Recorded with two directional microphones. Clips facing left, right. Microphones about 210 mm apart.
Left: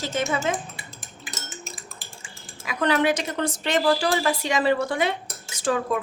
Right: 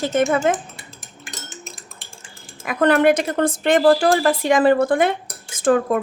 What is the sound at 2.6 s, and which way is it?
A woman's voice, 55° right (ahead or behind).